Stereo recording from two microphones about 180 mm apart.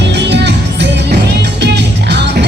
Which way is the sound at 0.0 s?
75° right (ahead or behind).